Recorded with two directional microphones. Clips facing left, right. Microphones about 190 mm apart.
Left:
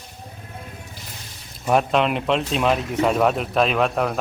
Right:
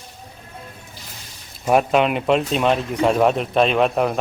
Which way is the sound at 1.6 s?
5° right (ahead or behind).